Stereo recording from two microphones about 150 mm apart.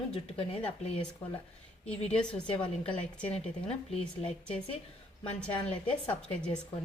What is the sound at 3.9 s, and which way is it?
Speech, 40° left (ahead or behind).